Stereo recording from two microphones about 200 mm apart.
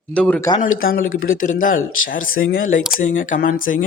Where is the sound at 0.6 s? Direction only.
45° left (ahead or behind).